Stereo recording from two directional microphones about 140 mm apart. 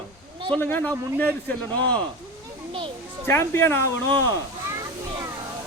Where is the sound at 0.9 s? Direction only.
20° right (ahead or behind).